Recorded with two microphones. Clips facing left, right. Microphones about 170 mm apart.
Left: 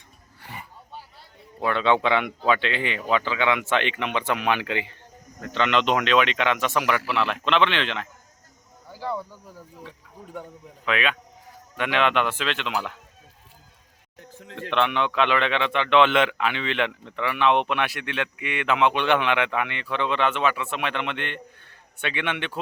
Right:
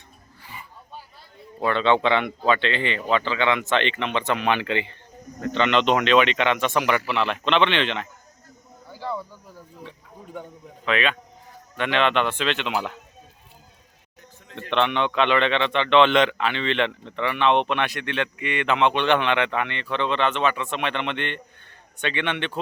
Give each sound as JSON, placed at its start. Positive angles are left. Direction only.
{"t": 1.6, "sound": "a man's voice", "side_deg": 5}
{"t": 8.9, "sound": "a sound", "side_deg": 10}
{"t": 10.8, "sound": "a man's voice", "side_deg": 5}
{"t": 14.7, "sound": "a man's voice", "side_deg": 5}